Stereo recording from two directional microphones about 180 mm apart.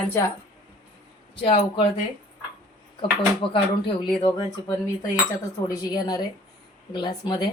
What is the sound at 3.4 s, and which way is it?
Speech, 30° left (ahead or behind).